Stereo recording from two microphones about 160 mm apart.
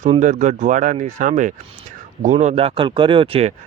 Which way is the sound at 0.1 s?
50° right (ahead or behind).